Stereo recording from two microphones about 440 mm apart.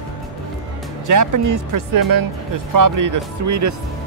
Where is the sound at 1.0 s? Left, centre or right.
Right.